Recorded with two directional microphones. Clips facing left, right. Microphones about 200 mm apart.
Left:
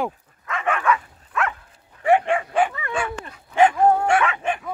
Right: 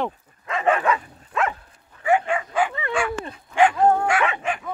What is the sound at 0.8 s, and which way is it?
Dog, 25° right (ahead or behind).